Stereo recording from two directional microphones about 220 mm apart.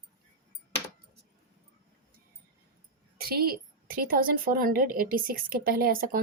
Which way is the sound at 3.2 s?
45° right (ahead or behind).